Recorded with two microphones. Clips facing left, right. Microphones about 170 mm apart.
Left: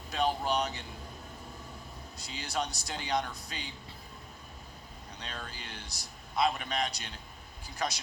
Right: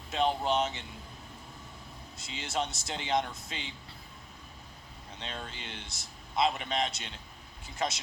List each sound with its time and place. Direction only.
0.1 s speech: 25° right (ahead or behind)
2.1 s speech: 25° right (ahead or behind)
5.2 s speech: 25° right (ahead or behind)